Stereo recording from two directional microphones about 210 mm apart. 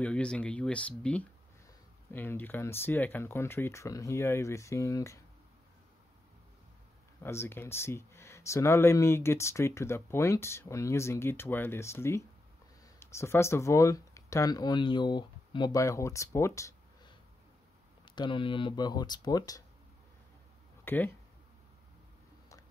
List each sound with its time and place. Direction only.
0.0 s speech: 5° left (ahead or behind)
7.2 s speech: 10° left (ahead or behind)
20.8 s speech: 10° left (ahead or behind)